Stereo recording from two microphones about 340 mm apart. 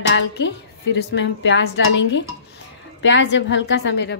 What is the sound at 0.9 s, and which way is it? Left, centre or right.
A woman's voice, left.